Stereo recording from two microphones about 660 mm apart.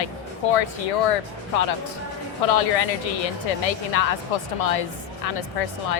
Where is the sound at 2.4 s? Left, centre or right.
Left.